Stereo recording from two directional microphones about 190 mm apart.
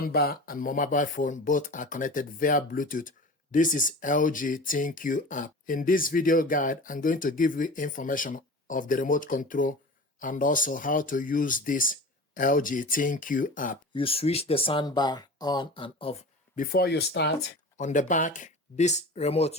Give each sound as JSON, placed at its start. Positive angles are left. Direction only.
{"t": 0.0, "sound": "speech", "side_deg": 55}
{"t": 13.9, "sound": "speech", "side_deg": 30}
{"t": 16.6, "sound": "speech", "side_deg": 55}
{"t": 17.7, "sound": "speech", "side_deg": 40}